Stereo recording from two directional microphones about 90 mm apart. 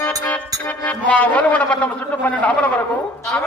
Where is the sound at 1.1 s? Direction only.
15° left (ahead or behind).